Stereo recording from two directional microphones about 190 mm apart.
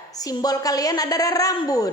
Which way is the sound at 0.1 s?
20° left (ahead or behind).